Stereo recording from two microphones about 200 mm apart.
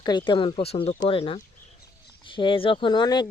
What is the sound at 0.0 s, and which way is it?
Speech, 20° left (ahead or behind).